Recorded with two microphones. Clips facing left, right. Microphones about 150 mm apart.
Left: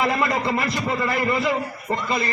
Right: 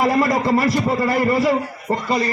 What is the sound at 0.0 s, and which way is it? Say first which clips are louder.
A man's voice: right 5 dB; 40° right (ahead or behind).